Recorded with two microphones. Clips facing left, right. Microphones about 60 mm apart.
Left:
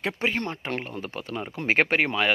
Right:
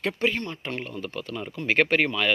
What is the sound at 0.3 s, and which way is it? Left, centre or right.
Speech, left.